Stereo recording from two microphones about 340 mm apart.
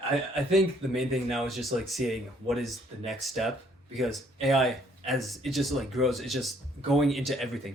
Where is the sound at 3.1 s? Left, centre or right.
Centre.